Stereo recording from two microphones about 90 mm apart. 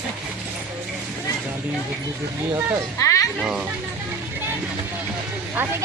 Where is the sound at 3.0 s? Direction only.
35° left (ahead or behind).